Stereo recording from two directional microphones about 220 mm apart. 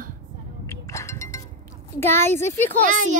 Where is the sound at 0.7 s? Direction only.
15° left (ahead or behind).